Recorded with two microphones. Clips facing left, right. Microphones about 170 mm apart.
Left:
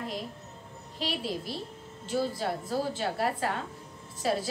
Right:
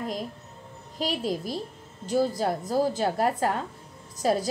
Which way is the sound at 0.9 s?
45° right (ahead or behind).